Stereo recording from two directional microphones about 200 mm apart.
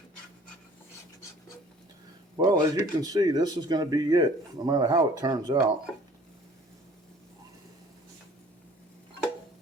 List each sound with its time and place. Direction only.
2.4 s speech: 20° right (ahead or behind)